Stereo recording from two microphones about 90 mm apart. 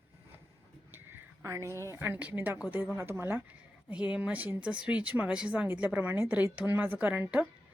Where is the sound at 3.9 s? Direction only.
10° right (ahead or behind).